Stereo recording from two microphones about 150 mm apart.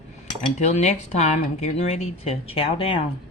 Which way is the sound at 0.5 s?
50° left (ahead or behind).